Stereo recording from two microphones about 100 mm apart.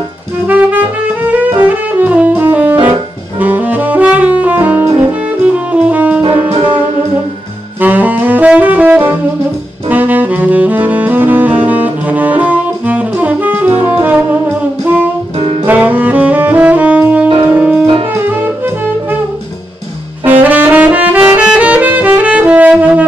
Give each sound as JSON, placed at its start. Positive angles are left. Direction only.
{"t": 0.5, "sound": "music", "side_deg": -15}
{"t": 3.3, "sound": "saxophone", "side_deg": -15}
{"t": 7.8, "sound": "saxophone", "side_deg": -20}
{"t": 15.3, "sound": "music", "side_deg": -65}
{"t": 15.6, "sound": "saxophone", "side_deg": -15}
{"t": 17.6, "sound": "music", "side_deg": -15}
{"t": 20.2, "sound": "saxophone", "side_deg": -15}
{"t": 21.4, "sound": "music", "side_deg": -15}